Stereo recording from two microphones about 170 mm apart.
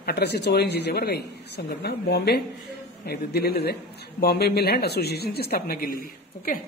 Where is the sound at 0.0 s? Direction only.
70° left (ahead or behind).